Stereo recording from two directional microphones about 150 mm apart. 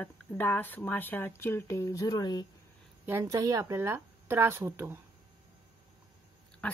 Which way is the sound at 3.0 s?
15° right (ahead or behind).